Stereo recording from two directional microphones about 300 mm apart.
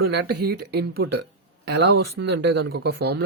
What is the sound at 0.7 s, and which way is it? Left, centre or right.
Speech, right.